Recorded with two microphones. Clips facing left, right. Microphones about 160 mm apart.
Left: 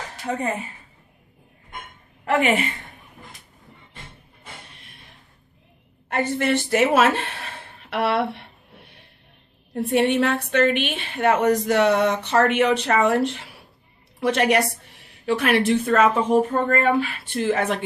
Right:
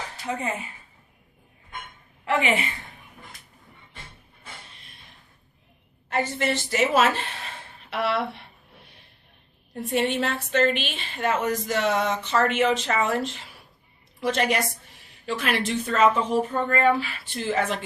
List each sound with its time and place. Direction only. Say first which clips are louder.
0.3 s a woman's voice: left 4 dB; 45° left (ahead or behind)
2.2 s a woman's voice: left 4 dB; 45° left (ahead or behind)
6.1 s speech: left 4 dB; 55° left (ahead or behind)
9.7 s a woman's voice: left 5 dB; 55° left (ahead or behind)